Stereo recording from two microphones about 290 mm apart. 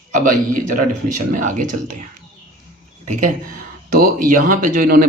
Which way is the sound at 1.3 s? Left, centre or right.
Right.